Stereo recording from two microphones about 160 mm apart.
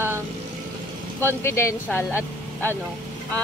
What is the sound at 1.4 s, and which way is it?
Speech, 15° left (ahead or behind).